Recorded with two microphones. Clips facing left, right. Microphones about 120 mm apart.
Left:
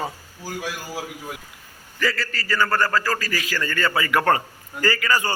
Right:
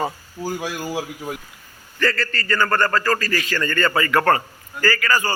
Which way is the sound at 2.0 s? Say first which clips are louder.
Right 3 dB; 5° left (ahead or behind).